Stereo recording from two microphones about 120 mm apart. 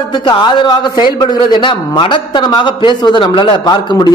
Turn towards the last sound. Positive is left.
turn(degrees=40)  # may be behind; listen again after turning